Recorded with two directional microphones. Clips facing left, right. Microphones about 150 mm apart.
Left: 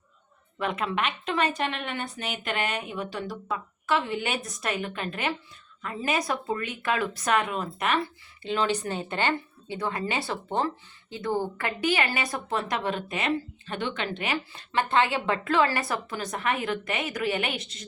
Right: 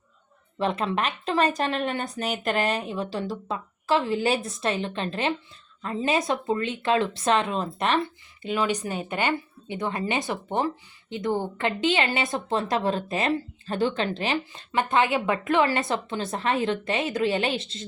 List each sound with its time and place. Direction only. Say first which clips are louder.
0.6 s speech: right 3 dB; 30° right (ahead or behind)
14.7 s speech: right 2 dB; 20° right (ahead or behind)